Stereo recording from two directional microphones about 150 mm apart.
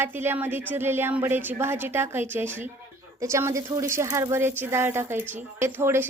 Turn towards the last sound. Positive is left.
turn(degrees=-15)  # may be behind; listen again after turning